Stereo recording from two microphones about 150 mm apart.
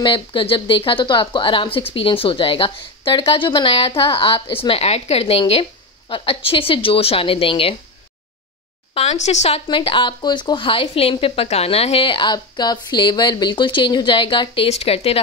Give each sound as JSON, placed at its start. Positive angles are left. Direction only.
{"t": 0.0, "sound": "a woman's voice", "side_deg": 35}
{"t": 8.9, "sound": "a woman's voice", "side_deg": 45}
{"t": 9.7, "sound": "a woman's voice", "side_deg": 35}